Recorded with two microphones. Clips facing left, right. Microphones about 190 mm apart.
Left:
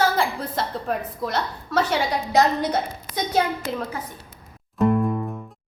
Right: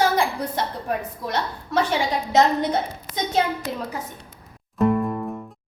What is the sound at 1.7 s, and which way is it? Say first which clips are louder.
Speech: even; 15° right (ahead or behind).